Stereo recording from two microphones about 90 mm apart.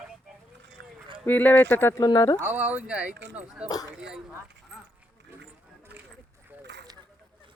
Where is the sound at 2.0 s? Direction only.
45° left (ahead or behind).